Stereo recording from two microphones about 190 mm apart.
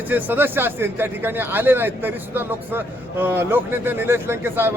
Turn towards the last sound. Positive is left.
turn(degrees=-10)  # may be behind; listen again after turning